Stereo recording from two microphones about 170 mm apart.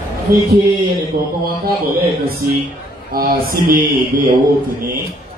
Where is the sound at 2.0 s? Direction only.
65° right (ahead or behind).